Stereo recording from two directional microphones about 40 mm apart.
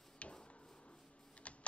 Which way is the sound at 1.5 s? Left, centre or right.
Left.